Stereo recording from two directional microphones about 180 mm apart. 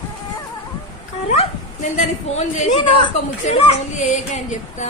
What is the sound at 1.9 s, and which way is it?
A man's voice, 45° left (ahead or behind).